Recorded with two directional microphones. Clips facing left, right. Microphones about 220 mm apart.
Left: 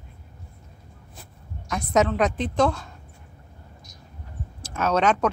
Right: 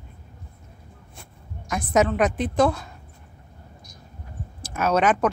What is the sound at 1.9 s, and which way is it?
A woman's voice, 5° right (ahead or behind).